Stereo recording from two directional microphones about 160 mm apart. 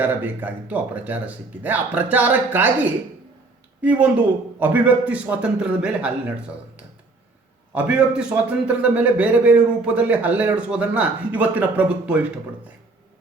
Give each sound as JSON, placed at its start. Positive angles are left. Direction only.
{"t": 0.0, "sound": "a man's voice", "side_deg": -10}
{"t": 3.8, "sound": "a man's voice", "side_deg": -10}
{"t": 7.7, "sound": "a man's voice", "side_deg": -5}